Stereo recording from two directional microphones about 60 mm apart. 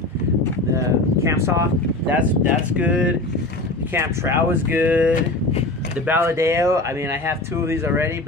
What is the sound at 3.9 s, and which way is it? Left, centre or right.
Speech, right.